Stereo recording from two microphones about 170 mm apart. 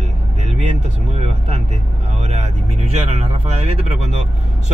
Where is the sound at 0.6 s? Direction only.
40° right (ahead or behind).